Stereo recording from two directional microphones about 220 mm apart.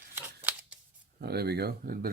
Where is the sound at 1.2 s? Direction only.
45° right (ahead or behind).